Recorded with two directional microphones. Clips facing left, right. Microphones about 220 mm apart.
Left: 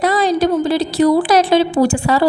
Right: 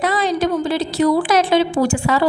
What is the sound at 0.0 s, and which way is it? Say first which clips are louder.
A woman's voice: left 4 dB; 40° left (ahead or behind).